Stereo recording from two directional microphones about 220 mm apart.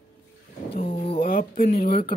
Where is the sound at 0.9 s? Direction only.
25° left (ahead or behind).